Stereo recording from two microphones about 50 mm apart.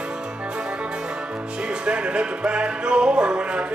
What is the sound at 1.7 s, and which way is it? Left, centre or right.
Music, right.